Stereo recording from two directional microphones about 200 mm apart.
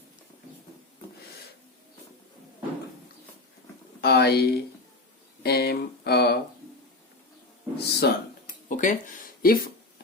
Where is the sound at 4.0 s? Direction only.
55° left (ahead or behind).